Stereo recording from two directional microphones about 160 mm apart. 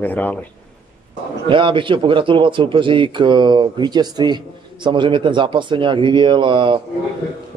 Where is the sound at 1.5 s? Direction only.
30° right (ahead or behind).